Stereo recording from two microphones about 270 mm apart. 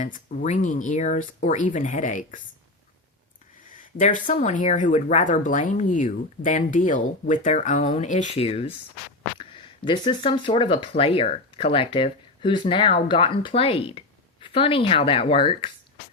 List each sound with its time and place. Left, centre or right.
0.0 s speech: left
3.8 s speech: left